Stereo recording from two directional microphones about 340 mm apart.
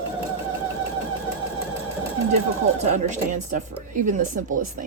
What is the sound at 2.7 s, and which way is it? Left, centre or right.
Speech, centre.